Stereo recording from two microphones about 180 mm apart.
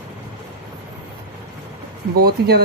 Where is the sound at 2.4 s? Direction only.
65° right (ahead or behind).